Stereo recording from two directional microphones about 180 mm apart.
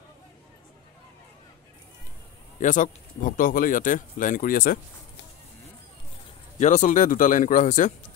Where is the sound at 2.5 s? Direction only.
45° left (ahead or behind).